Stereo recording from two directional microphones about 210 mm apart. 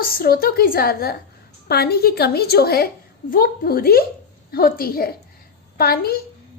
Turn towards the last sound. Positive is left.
turn(degrees=45)  # may be behind; listen again after turning